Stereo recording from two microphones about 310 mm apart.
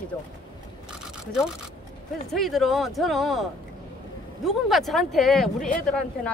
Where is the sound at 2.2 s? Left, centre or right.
Centre.